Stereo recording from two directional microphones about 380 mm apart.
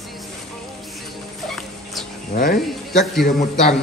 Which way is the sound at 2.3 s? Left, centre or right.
Left.